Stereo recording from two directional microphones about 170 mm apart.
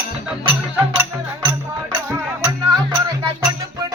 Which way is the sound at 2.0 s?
10° right (ahead or behind).